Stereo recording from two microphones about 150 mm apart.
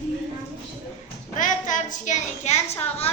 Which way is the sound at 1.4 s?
60° left (ahead or behind).